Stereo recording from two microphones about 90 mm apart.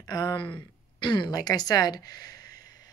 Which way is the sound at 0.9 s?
60° left (ahead or behind).